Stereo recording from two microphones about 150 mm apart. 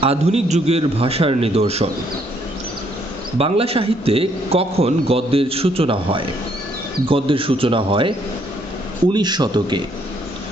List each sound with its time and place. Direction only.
0.0 s a man's voice: 45° right (ahead or behind)
3.3 s a man's voice: 40° right (ahead or behind)
9.1 s speech: 30° right (ahead or behind)